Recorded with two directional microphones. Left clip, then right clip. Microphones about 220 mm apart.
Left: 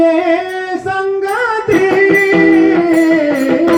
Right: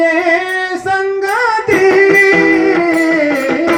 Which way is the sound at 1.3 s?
40° right (ahead or behind).